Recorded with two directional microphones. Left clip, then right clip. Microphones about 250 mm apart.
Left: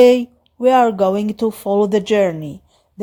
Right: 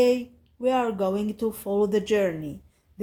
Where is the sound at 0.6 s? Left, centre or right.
Left.